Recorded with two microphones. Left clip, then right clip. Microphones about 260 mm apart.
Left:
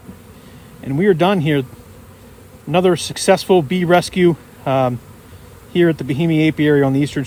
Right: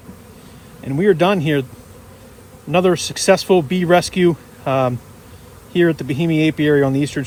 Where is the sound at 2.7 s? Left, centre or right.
Left.